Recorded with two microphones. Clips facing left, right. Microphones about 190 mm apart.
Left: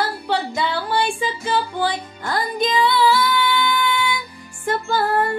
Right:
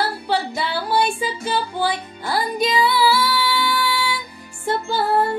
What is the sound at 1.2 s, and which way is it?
Music, 10° right (ahead or behind).